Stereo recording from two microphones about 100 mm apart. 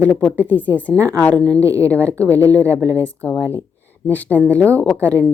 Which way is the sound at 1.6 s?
30° right (ahead or behind).